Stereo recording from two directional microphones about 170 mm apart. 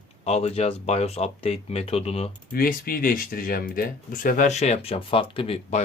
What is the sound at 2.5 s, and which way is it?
Speech, 60° left (ahead or behind).